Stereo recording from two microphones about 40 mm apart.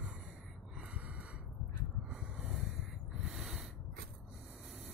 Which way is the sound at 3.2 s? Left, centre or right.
Centre.